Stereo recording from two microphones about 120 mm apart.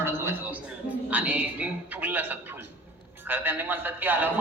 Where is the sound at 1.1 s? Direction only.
15° right (ahead or behind).